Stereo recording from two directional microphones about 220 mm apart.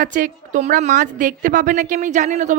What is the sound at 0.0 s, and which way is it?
A woman's voice, 35° right (ahead or behind).